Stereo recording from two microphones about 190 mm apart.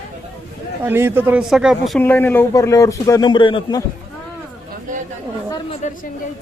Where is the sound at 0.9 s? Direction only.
10° right (ahead or behind).